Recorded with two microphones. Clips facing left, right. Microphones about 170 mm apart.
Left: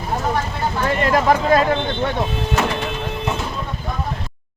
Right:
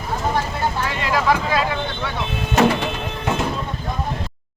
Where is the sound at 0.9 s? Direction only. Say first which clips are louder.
Left 6 dB; 50° left (ahead or behind).